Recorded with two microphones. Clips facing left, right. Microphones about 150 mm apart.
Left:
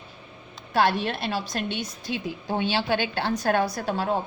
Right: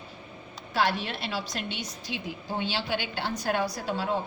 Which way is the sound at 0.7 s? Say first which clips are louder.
Left 5 dB; 55° left (ahead or behind).